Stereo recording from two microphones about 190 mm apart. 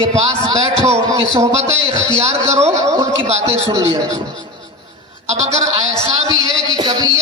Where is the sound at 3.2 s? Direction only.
35° right (ahead or behind).